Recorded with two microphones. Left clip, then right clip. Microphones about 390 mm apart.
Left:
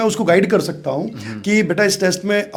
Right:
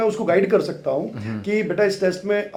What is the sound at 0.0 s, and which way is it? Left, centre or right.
Speech, left.